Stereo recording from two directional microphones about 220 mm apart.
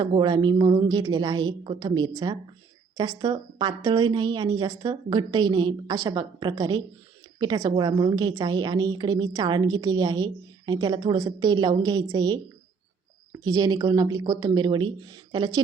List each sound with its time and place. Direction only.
0.0 s a woman's voice: 20° right (ahead or behind)
13.4 s a woman's voice: 20° right (ahead or behind)